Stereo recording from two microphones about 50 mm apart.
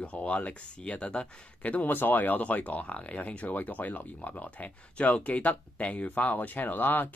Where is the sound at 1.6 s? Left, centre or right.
Left.